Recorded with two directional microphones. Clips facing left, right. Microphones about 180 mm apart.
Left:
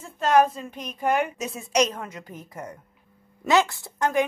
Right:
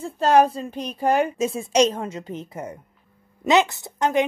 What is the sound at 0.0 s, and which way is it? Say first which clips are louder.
A woman's voice: right 3 dB; 35° right (ahead or behind).